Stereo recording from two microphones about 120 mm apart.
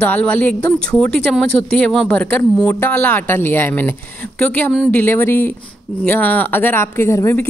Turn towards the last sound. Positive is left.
turn(degrees=20)  # may be behind; listen again after turning